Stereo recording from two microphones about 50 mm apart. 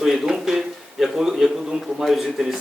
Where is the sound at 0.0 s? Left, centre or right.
Centre.